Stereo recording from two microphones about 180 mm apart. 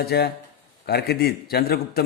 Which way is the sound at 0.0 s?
65° left (ahead or behind).